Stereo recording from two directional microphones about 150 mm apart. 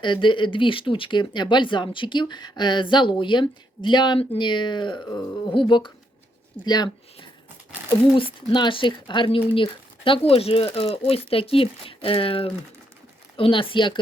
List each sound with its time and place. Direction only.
0.0 s speech: 30° left (ahead or behind)